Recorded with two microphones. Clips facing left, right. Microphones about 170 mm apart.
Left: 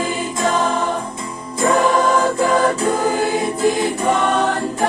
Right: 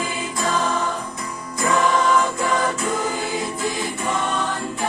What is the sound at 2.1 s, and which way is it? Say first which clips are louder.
Choir: left 5 dB; 55° left (ahead or behind).